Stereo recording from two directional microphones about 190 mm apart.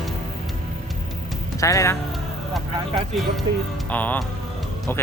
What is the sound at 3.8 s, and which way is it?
Speech, 10° left (ahead or behind).